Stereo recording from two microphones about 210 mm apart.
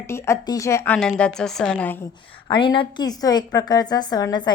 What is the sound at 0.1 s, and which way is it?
A woman's voice, 10° left (ahead or behind).